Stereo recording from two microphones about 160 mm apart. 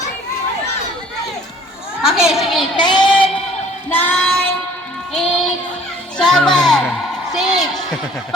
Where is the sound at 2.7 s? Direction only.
30° left (ahead or behind).